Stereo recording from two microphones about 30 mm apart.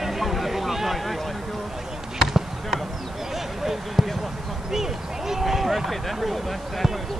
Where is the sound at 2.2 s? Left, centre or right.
Centre.